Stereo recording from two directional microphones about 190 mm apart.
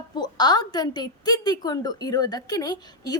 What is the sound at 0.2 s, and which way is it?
A woman's voice, 20° left (ahead or behind).